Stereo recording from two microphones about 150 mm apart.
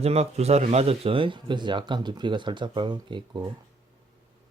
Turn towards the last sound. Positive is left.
turn(degrees=-30)  # may be behind; listen again after turning